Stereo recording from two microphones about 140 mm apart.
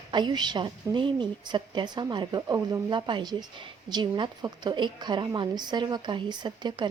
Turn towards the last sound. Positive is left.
turn(degrees=-30)  # may be behind; listen again after turning